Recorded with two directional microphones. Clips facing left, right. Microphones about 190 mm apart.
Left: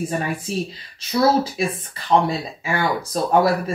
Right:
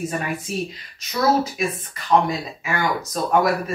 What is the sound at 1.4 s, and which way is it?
Speech, 30° left (ahead or behind).